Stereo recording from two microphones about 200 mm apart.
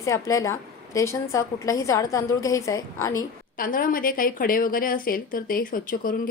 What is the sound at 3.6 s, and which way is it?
A woman's voice, 45° left (ahead or behind).